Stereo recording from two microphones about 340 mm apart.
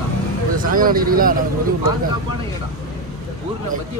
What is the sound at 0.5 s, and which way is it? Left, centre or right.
A man's voice, right.